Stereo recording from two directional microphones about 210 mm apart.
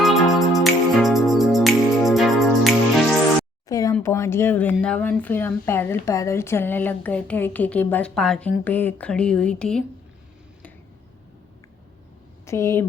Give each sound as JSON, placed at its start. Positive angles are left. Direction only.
{"t": 0.0, "sound": "music", "side_deg": 0}
{"t": 3.7, "sound": "a sound", "side_deg": 15}
{"t": 3.9, "sound": "speech", "side_deg": 10}
{"t": 12.5, "sound": "speech", "side_deg": 15}